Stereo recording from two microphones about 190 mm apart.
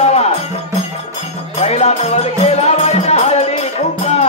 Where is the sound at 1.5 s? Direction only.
35° left (ahead or behind).